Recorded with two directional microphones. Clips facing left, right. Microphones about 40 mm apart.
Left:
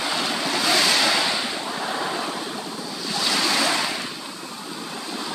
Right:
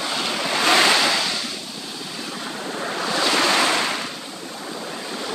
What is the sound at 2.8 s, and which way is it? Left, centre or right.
Waves, right.